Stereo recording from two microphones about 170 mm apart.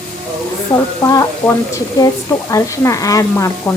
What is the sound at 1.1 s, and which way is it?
Speech, 15° left (ahead or behind).